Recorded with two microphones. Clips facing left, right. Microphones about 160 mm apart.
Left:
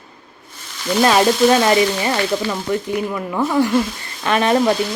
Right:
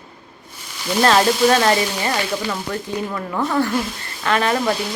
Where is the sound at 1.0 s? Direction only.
10° left (ahead or behind).